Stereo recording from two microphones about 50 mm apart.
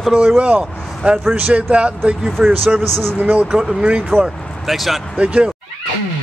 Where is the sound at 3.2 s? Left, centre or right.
Right.